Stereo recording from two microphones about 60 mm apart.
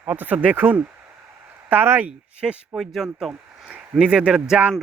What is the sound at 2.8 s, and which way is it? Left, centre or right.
Speech, centre.